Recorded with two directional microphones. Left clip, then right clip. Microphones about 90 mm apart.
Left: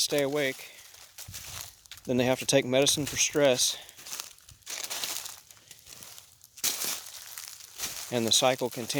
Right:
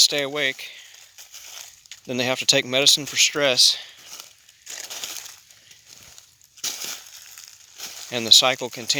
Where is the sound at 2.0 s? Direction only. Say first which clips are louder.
Right 5 dB; 40° left (ahead or behind).